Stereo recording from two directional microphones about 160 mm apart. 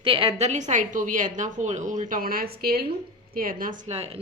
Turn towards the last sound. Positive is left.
turn(degrees=-40)  # may be behind; listen again after turning